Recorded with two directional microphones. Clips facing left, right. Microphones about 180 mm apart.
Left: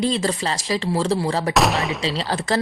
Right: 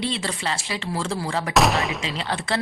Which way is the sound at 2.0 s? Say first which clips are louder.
Left 4 dB; 35° left (ahead or behind).